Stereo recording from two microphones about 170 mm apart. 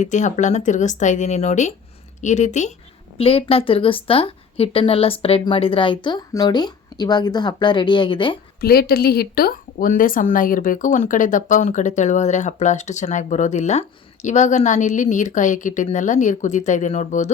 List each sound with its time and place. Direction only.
0.0 s a woman's voice: 45° left (ahead or behind); by 8.4 s 30° left (ahead or behind)
8.6 s speech: 65° left (ahead or behind); by 17.3 s 40° left (ahead or behind)